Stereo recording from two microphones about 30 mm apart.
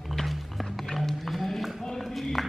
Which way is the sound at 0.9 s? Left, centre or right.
Centre.